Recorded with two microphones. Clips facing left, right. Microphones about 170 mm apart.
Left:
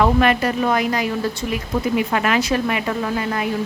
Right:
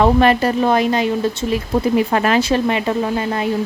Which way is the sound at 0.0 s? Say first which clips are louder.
Right 3 dB; 30° right (ahead or behind).